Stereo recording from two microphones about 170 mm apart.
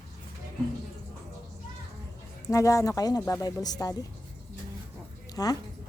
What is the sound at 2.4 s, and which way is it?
Speech, 20° left (ahead or behind).